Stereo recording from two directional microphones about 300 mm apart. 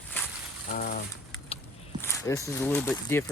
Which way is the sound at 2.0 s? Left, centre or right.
Centre.